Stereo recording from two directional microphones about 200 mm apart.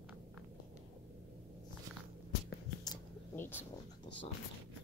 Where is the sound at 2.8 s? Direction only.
15° left (ahead or behind).